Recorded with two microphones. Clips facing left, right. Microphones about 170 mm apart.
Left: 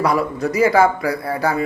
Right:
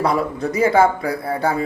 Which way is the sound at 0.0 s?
25° right (ahead or behind).